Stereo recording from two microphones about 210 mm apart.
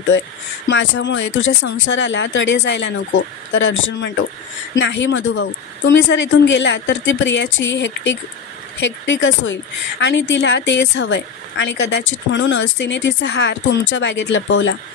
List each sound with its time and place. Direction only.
0.7 s a woman's voice: 60° left (ahead or behind)